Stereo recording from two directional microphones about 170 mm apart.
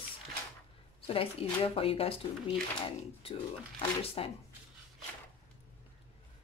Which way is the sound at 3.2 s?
35° left (ahead or behind).